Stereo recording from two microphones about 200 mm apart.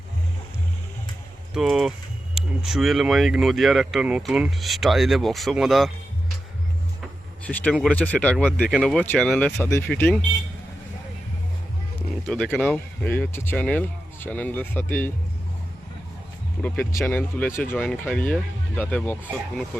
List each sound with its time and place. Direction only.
1.5 s speech: centre (ahead or behind)
7.4 s speech: 5° left (ahead or behind)
12.2 s speech: 5° left (ahead or behind)
16.6 s speech: 10° left (ahead or behind)